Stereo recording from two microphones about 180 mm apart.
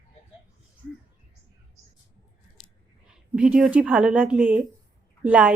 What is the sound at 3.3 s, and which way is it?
A woman's voice, 5° right (ahead or behind).